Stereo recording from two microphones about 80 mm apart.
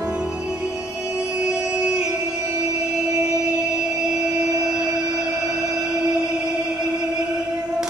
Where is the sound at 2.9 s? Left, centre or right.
Centre.